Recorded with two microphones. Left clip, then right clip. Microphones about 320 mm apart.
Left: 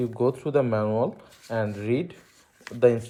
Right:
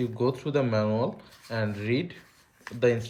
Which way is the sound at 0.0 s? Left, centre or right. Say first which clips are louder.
Left 3 dB; centre.